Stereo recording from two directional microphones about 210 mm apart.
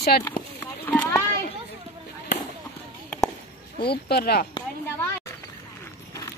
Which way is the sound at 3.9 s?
45° left (ahead or behind).